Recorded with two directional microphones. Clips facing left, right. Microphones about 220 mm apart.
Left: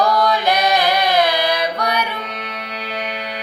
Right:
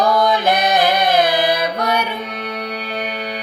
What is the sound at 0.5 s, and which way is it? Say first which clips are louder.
Chant: even; 50° right (ahead or behind).